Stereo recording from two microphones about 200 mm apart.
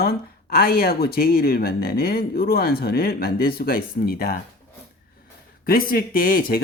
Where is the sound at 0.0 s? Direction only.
50° left (ahead or behind).